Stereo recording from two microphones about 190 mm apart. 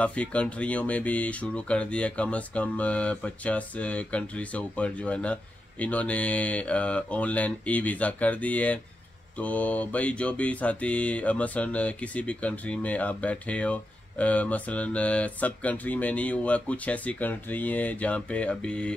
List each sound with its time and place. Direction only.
0.0 s mantra: 5° left (ahead or behind)